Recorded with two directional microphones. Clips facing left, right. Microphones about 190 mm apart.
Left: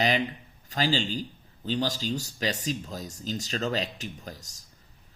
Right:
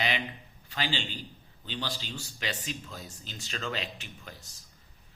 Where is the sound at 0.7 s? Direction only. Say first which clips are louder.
Left 7 dB; 40° left (ahead or behind).